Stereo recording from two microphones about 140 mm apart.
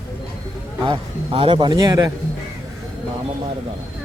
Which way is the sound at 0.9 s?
40° right (ahead or behind).